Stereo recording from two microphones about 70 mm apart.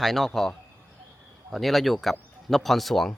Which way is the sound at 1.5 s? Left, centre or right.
Centre.